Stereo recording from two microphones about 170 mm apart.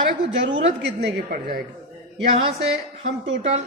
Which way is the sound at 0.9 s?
70° right (ahead or behind).